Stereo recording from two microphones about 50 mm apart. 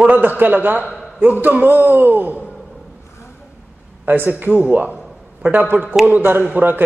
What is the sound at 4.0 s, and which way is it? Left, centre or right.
Speech, right.